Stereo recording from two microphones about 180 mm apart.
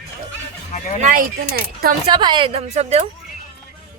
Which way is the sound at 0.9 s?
50° right (ahead or behind).